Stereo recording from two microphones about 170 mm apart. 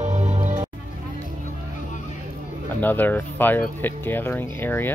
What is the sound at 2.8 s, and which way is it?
Speech, 10° left (ahead or behind).